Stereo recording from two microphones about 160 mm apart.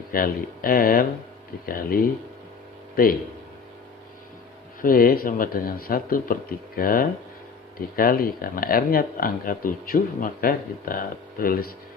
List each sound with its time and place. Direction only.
0.1 s speech: 65° left (ahead or behind)
4.8 s speech: 65° left (ahead or behind)